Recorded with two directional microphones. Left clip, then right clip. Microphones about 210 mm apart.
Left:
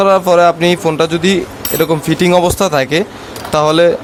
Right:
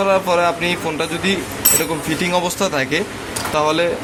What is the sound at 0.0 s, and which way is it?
Speech, 55° left (ahead or behind).